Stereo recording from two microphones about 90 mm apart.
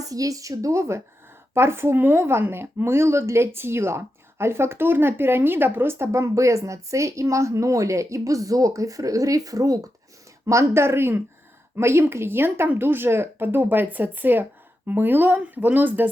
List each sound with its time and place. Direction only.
0.0 s speech: 40° right (ahead or behind); by 16.0 s 20° right (ahead or behind)